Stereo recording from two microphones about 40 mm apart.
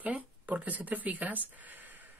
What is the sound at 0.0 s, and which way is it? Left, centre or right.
Speech, right.